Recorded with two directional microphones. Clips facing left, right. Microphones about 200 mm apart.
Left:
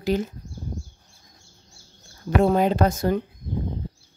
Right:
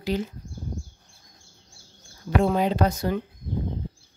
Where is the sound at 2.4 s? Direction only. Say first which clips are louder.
Left 3 dB; 50° left (ahead or behind).